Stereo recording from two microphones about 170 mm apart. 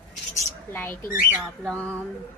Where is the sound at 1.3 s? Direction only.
10° right (ahead or behind).